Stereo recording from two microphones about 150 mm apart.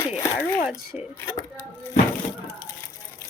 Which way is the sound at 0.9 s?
5° right (ahead or behind).